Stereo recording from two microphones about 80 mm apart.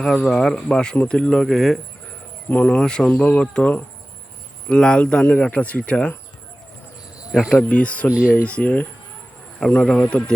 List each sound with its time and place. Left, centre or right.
0.0 s a man's voice: centre
2.5 s a man's voice: centre
7.3 s speech: centre
7.5 s a man's voice: centre
9.6 s a man's voice: centre